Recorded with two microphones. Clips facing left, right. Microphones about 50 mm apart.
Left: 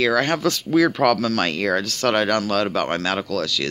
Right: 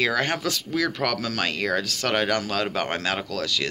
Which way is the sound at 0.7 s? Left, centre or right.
Centre.